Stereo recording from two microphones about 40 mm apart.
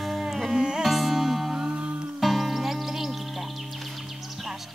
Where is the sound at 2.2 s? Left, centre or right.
Centre.